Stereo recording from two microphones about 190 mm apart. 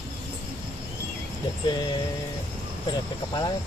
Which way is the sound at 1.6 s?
20° left (ahead or behind).